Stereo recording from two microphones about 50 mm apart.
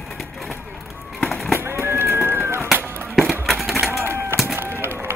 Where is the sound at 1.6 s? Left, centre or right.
Right.